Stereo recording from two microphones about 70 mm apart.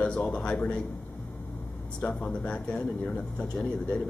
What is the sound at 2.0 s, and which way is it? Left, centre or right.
Speech, centre.